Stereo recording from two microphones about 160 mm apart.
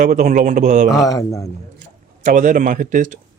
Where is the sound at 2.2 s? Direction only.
55° right (ahead or behind).